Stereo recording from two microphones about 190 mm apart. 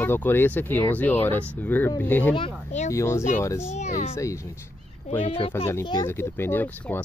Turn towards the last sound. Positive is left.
turn(degrees=10)  # may be behind; listen again after turning